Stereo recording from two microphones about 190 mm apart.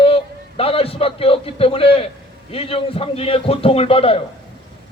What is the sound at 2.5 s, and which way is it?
A man's voice, 30° left (ahead or behind).